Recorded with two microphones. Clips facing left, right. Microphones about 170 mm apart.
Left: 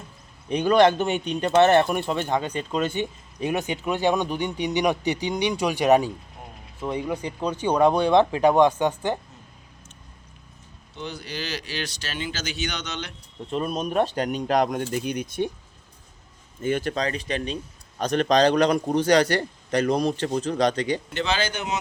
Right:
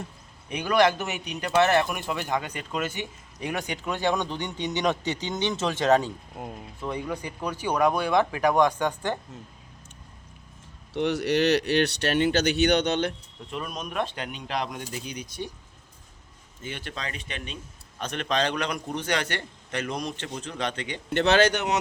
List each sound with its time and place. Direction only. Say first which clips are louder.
0.5 s speech: left 5 dB; 25° left (ahead or behind)
10.9 s speech: right 10 dB; 80° right; by 13.1 s 55° right (ahead or behind)
13.5 s a man's voice: left 8 dB; 35° left (ahead or behind); by 15.5 s 55° left (ahead or behind)
16.6 s a man's voice: left 12 dB; 45° left (ahead or behind)
21.1 s speech: right 6 dB; 65° right (ahead or behind)